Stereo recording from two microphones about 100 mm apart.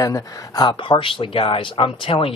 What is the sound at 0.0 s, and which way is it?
Speech, 35° left (ahead or behind).